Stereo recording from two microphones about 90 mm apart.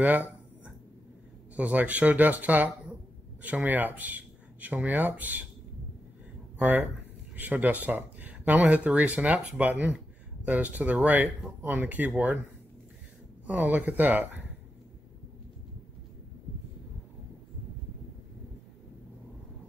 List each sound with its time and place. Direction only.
0.0 s a sound: 20° right (ahead or behind)
1.6 s speech: 15° right (ahead or behind)
6.6 s speech: 20° right (ahead or behind)
13.5 s speech: 20° right (ahead or behind)